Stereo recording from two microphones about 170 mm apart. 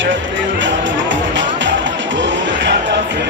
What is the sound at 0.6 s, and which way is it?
Music, 90° right.